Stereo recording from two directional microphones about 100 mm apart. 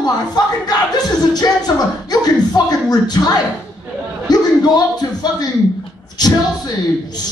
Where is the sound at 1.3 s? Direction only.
40° left (ahead or behind).